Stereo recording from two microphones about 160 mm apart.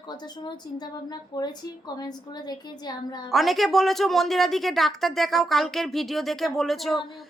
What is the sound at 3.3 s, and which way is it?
Speech, centre (ahead or behind).